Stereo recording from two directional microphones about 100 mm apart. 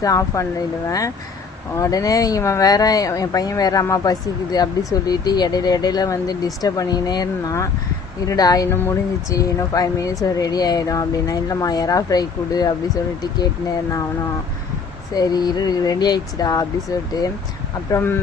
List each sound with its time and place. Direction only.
0.0 s speech: 35° left (ahead or behind)
8.7 s speech: 20° left (ahead or behind)
9.3 s speech: 35° left (ahead or behind)
15.1 s speech: 40° left (ahead or behind)
17.9 s speech: 25° left (ahead or behind)